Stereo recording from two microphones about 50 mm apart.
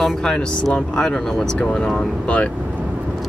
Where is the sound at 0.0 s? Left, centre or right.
Centre.